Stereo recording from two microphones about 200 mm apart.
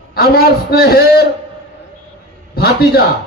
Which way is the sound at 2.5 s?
50° left (ahead or behind).